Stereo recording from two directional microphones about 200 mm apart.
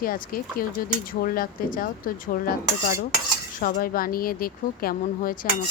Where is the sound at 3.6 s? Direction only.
45° left (ahead or behind).